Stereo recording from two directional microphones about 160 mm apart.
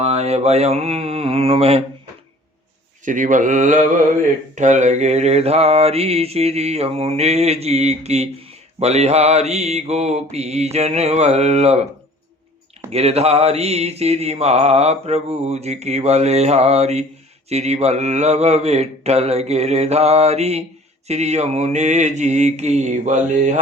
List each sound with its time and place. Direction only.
0.0 s mantra: 40° right (ahead or behind)
3.0 s mantra: 55° right (ahead or behind)
12.9 s mantra: 40° right (ahead or behind)